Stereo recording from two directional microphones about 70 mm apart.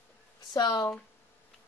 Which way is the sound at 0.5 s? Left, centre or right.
Left.